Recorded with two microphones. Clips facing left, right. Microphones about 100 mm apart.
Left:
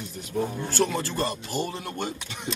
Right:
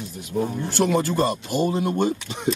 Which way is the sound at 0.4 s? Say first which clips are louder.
Right 3 dB; 15° right (ahead or behind).